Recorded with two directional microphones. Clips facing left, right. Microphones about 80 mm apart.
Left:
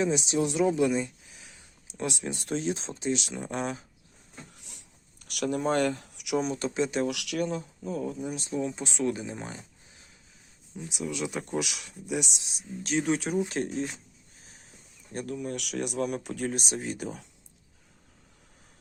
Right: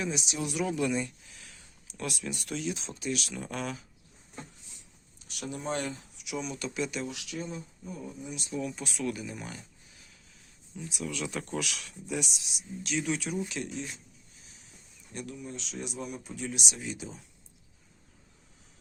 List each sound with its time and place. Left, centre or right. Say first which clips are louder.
0.0 s speech: left 7 dB; left
4.5 s a sound: left 3 dB; left
6.4 s speech: left 2 dB; left
7.1 s speech: left 8 dB; left
8.4 s speech: left 4 dB; left
14.4 s a sound: left 5 dB; left
15.1 s speech: left 6 dB; left
15.4 s speech: left 7 dB; left
16.5 s speech: left 5 dB; left